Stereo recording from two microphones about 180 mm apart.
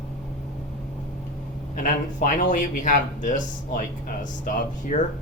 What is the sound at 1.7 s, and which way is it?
Speech, 45° left (ahead or behind).